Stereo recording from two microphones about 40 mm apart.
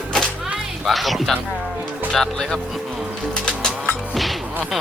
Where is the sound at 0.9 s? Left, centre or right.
Centre.